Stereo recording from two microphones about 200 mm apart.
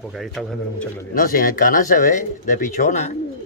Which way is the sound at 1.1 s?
45° left (ahead or behind).